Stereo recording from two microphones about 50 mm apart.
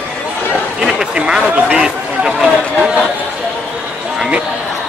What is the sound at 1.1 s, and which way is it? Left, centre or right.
Chatter, centre.